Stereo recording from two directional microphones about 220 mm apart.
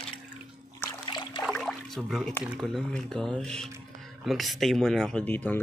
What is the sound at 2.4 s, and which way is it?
Speech, centre (ahead or behind).